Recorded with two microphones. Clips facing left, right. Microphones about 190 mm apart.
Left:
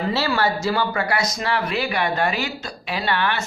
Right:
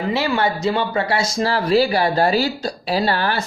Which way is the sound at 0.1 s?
15° right (ahead or behind).